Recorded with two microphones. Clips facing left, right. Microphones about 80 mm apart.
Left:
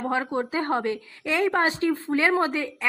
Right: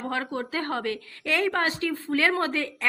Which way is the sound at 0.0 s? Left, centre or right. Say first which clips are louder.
Left 4 dB; left.